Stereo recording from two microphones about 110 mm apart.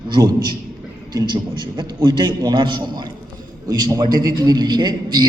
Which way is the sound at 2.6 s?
45° right (ahead or behind).